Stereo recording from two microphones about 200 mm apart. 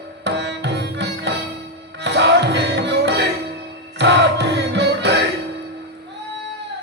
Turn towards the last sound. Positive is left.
turn(degrees=-60)  # may be behind; listen again after turning